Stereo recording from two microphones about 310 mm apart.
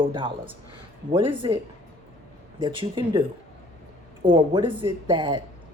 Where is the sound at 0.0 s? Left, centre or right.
Centre.